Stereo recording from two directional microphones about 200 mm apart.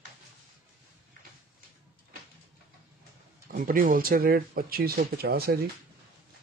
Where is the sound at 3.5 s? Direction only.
45° right (ahead or behind).